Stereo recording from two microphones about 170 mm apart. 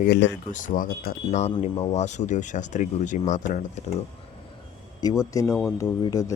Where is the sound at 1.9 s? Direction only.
45° left (ahead or behind).